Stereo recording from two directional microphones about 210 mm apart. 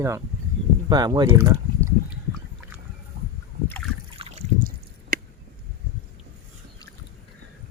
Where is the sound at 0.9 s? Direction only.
20° right (ahead or behind).